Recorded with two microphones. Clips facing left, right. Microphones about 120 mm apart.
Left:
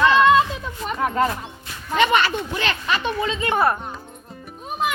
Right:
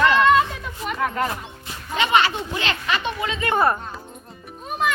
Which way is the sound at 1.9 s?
50° left (ahead or behind).